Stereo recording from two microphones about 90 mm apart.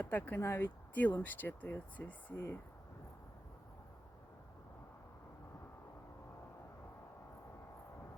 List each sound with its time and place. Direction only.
0.0 s speech: 20° left (ahead or behind)